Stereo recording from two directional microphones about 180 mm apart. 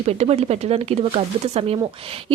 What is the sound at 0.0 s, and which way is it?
Speech, 35° right (ahead or behind).